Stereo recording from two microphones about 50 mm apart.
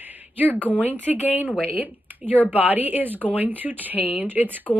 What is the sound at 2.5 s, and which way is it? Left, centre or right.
Speech, right.